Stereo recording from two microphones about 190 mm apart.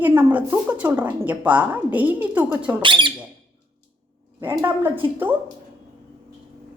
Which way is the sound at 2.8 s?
25° right (ahead or behind).